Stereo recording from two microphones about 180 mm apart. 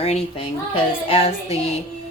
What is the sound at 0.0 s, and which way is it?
A child's voice, 35° left (ahead or behind).